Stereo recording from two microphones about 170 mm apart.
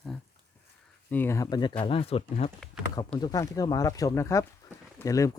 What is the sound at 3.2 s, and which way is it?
Speech, 20° left (ahead or behind).